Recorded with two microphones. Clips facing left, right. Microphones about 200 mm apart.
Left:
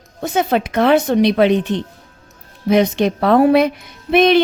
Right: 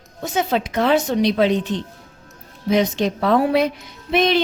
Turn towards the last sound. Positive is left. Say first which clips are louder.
# left 6 dB
turn(degrees=60)  # may be behind; listen again after turning